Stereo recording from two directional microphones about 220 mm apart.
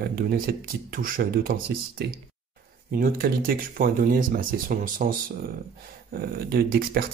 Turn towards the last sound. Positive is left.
turn(degrees=-45)  # may be behind; listen again after turning